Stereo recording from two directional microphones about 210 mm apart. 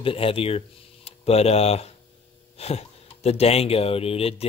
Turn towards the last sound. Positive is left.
turn(degrees=25)  # may be behind; listen again after turning